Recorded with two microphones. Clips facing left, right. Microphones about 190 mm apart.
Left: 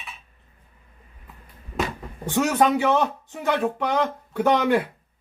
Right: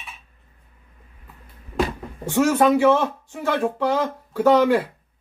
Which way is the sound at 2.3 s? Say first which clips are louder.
Right 3 dB; 20° left (ahead or behind).